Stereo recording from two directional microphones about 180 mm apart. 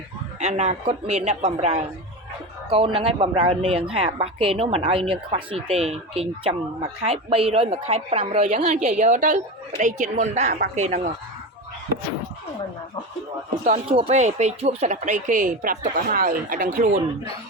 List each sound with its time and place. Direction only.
0.3 s a woman's voice: 40° right (ahead or behind)
13.7 s speech: 35° right (ahead or behind)